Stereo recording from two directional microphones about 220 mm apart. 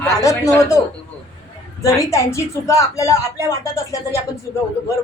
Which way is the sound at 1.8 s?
15° left (ahead or behind).